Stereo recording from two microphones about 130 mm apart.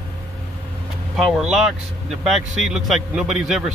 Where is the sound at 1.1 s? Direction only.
5° right (ahead or behind).